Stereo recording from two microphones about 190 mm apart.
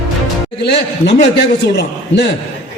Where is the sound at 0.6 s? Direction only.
60° left (ahead or behind).